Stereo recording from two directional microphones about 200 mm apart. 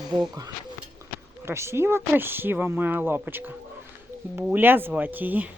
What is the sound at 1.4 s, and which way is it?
Speech, 15° right (ahead or behind).